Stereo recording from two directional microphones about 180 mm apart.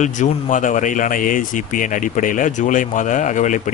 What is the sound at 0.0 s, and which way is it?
Speech, 45° left (ahead or behind).